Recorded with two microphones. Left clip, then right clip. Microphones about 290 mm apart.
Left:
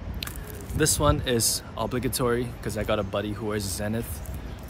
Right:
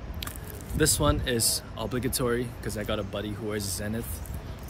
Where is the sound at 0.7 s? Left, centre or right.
Centre.